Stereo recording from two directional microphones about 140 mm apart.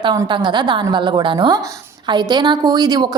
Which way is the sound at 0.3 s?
35° right (ahead or behind).